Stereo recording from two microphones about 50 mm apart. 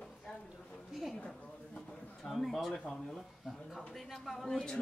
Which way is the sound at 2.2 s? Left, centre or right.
Centre.